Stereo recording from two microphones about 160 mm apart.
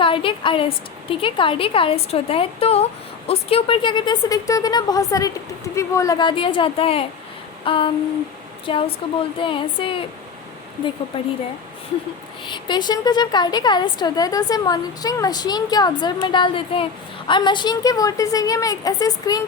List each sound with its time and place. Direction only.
0.0 s a woman's voice: 35° left (ahead or behind)
11.1 s a woman's voice: 30° left (ahead or behind)
12.5 s a woman's voice: 30° left (ahead or behind)